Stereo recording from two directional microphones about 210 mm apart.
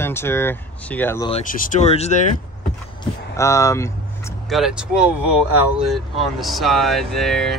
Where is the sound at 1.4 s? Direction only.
40° left (ahead or behind).